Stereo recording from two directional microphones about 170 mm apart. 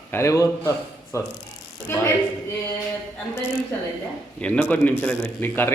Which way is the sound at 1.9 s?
15° left (ahead or behind).